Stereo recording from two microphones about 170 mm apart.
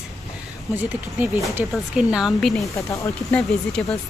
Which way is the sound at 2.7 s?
15° left (ahead or behind).